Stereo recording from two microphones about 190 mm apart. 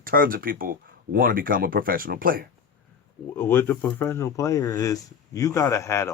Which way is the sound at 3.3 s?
10° left (ahead or behind).